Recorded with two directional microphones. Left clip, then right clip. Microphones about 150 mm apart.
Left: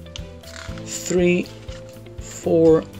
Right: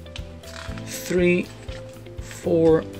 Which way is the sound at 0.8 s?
20° left (ahead or behind).